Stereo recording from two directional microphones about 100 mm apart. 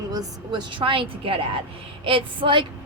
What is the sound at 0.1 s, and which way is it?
Speech, 40° right (ahead or behind).